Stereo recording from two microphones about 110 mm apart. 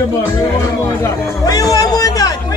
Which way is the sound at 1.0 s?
35° left (ahead or behind).